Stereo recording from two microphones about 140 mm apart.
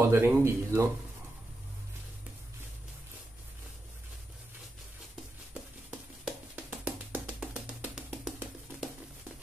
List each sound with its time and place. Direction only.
0.0 s speech: 15° right (ahead or behind)
5.5 s music: 5° right (ahead or behind)